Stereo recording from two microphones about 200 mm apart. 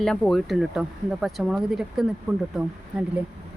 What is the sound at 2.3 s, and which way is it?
Speech, 15° right (ahead or behind).